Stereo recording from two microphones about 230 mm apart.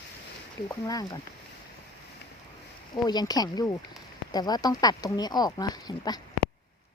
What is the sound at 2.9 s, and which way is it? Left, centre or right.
Speech, centre.